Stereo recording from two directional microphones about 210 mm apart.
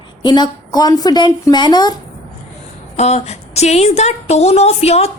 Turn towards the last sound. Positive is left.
turn(degrees=30)  # may be behind; listen again after turning